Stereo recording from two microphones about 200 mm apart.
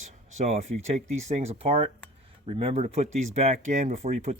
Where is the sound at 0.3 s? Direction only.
35° right (ahead or behind).